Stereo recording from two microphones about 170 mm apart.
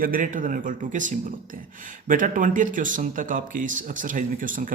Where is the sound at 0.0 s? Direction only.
50° right (ahead or behind).